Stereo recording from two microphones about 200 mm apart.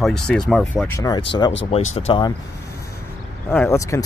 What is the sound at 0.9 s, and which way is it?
Speech, 20° left (ahead or behind).